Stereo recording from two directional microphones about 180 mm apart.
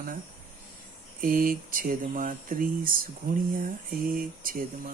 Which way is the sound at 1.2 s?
50° right (ahead or behind).